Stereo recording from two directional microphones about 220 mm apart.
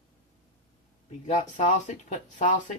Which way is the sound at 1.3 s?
30° left (ahead or behind).